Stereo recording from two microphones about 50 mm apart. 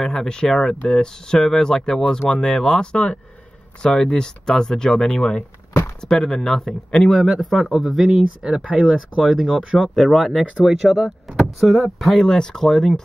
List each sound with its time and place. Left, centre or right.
0.0 s speech: centre
7.1 s speech: centre
9.9 s speech: centre